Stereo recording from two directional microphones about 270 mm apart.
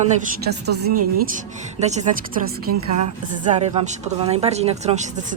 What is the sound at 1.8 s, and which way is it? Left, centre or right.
Speech, right.